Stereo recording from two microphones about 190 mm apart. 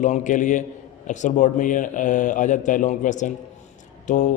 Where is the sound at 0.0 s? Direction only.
40° left (ahead or behind).